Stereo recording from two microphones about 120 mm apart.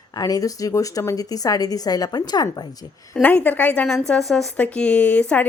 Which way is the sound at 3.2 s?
15° left (ahead or behind).